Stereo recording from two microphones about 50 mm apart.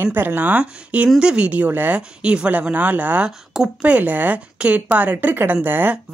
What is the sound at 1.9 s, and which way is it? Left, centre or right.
A woman's voice, right.